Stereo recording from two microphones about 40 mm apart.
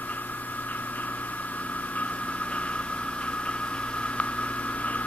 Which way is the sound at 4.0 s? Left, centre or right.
Left.